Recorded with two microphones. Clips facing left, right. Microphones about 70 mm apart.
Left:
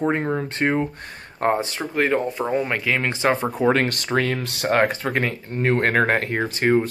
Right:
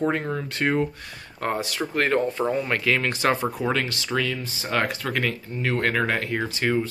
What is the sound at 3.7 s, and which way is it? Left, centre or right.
Speech, left.